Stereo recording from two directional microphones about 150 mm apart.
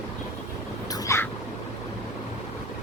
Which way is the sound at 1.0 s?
20° left (ahead or behind).